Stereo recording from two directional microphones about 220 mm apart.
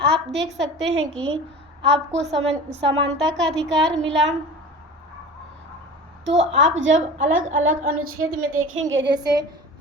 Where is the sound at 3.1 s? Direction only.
Centre (ahead or behind).